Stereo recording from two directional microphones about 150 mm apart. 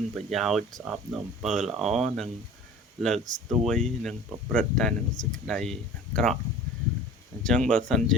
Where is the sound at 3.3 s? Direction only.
5° left (ahead or behind).